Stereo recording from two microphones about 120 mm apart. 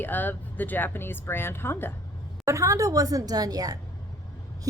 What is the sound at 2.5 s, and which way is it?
A woman's voice, 25° right (ahead or behind).